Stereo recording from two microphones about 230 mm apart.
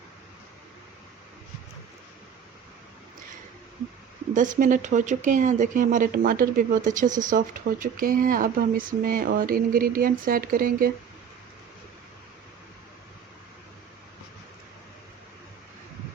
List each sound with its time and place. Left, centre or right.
4.4 s speech: right